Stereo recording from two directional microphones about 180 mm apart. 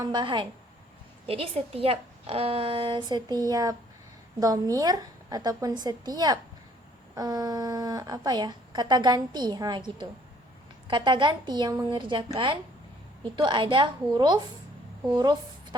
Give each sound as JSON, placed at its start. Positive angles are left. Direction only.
{"t": 0.0, "sound": "a woman's voice", "side_deg": -25}